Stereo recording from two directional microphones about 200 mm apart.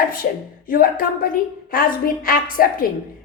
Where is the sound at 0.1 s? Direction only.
45° left (ahead or behind).